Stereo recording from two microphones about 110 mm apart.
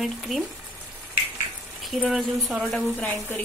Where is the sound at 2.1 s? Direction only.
Centre (ahead or behind).